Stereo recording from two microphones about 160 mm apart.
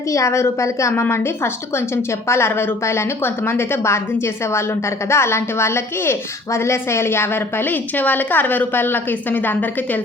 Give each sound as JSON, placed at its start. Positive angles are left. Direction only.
{"t": 0.1, "sound": "a woman's voice", "side_deg": 20}
{"t": 2.2, "sound": "a woman's voice", "side_deg": 15}
{"t": 5.0, "sound": "a woman's voice", "side_deg": 15}